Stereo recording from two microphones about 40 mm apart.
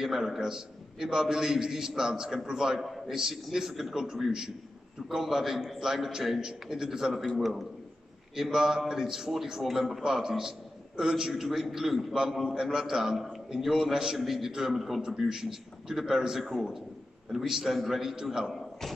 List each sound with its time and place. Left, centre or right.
0.0 s a man's voice: centre
15.0 s a man's voice: centre